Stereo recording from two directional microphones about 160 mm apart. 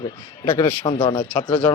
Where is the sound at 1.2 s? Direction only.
10° left (ahead or behind).